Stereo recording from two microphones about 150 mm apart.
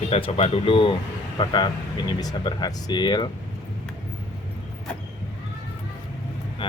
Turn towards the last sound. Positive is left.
turn(degrees=35)  # may be behind; listen again after turning